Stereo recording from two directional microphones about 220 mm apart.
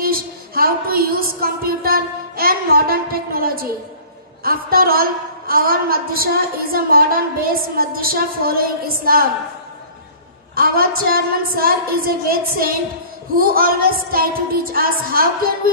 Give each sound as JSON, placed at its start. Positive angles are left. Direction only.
{"t": 0.0, "sound": "a sound", "side_deg": -40}
{"t": 4.4, "sound": "a woman's voice", "side_deg": -40}
{"t": 10.5, "sound": "a woman's voice", "side_deg": -40}